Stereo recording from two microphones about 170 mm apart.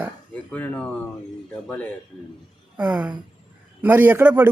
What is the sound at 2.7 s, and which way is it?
A woman's voice, 10° right (ahead or behind).